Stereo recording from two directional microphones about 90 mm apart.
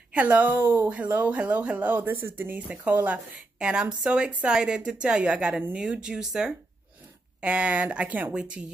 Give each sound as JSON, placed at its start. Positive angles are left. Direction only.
{"t": 0.1, "sound": "a woman's voice", "side_deg": -15}